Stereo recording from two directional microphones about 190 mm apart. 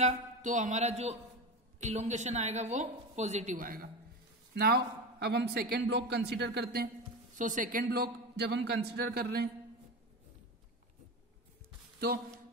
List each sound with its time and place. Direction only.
0.0 s a woman's voice: 40° right (ahead or behind); by 6.9 s 60° right (ahead or behind)
7.3 s a man's voice: 40° right (ahead or behind)